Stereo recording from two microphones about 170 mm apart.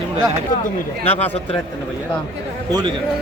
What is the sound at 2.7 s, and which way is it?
Speech, 25° right (ahead or behind).